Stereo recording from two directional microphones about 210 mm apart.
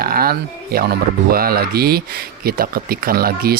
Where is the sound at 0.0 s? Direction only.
45° right (ahead or behind).